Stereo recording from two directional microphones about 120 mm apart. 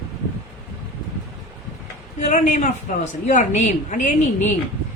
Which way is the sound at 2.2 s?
80° left.